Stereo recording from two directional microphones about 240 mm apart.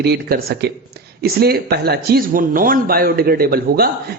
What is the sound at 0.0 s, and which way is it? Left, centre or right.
Speech, right.